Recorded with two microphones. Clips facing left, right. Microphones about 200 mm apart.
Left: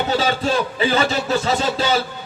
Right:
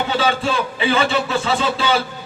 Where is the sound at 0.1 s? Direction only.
40° left (ahead or behind).